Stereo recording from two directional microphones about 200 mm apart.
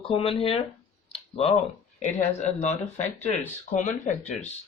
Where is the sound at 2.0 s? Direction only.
35° left (ahead or behind).